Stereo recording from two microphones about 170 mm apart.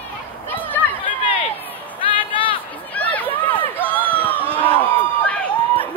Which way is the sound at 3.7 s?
10° right (ahead or behind).